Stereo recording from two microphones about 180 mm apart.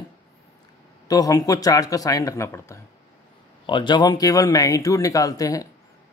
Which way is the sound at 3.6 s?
25° left (ahead or behind).